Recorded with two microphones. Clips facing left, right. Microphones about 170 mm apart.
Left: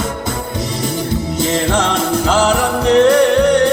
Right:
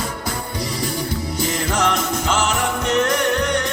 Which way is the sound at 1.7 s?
30° left (ahead or behind).